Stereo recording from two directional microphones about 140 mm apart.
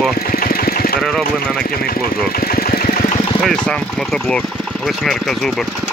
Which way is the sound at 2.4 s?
90° left.